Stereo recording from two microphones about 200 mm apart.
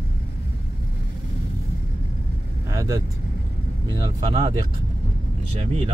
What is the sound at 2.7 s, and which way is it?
Speech, 15° right (ahead or behind).